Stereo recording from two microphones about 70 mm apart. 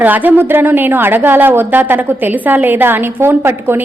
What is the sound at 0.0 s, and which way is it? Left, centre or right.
A woman's voice, right.